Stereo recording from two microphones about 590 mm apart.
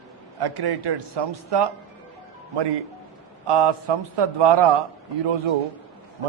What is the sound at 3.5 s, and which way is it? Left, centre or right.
Speech, right.